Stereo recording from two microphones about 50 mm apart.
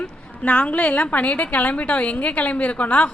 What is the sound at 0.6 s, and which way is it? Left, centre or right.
A woman's voice, left.